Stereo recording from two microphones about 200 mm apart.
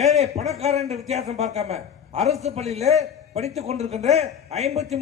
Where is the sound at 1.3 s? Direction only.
30° right (ahead or behind).